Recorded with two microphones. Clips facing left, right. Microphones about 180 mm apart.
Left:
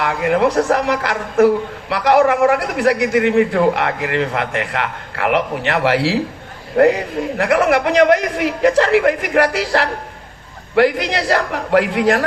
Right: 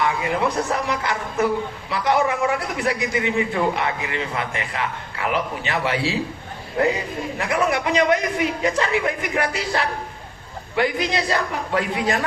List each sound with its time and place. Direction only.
0.0 s a man's voice: 65° left (ahead or behind)